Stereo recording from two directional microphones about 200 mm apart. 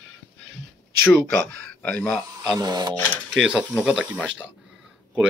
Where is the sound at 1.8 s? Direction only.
5° left (ahead or behind).